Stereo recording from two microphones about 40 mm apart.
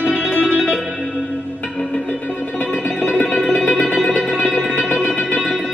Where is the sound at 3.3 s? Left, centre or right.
Left.